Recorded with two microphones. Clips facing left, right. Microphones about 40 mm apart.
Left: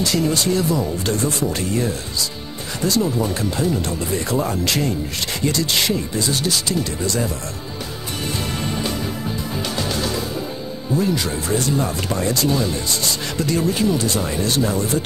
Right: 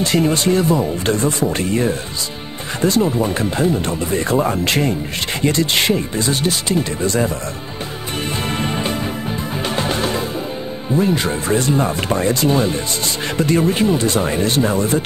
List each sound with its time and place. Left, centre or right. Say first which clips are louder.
0.0 s speech: right 3 dB; right
8.5 s music: right 3 dB; right
11.0 s speech: right 4 dB; right